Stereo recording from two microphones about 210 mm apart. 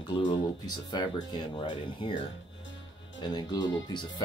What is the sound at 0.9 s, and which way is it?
Speech, 20° left (ahead or behind).